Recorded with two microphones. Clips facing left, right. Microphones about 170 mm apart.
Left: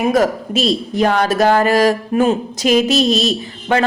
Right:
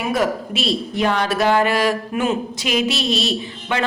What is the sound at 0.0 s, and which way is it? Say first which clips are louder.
A woman's voice: left 5 dB; 40° left (ahead or behind).